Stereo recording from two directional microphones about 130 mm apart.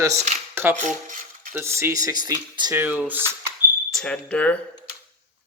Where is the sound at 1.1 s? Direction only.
90° right.